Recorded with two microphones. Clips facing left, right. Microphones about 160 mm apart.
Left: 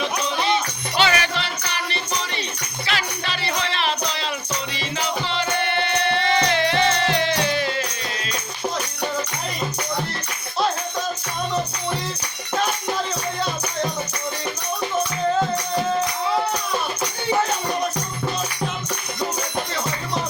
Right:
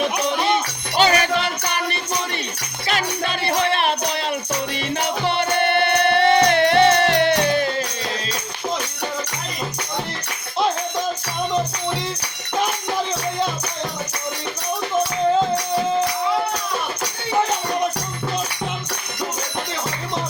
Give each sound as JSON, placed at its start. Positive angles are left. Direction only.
{"t": 0.9, "sound": "music", "side_deg": -45}